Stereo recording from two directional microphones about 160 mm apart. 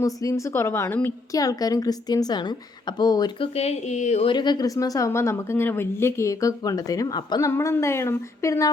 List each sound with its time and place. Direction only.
0.0 s a woman's voice: 20° left (ahead or behind)
3.6 s speech: 45° left (ahead or behind)
4.3 s a woman's voice: 25° left (ahead or behind)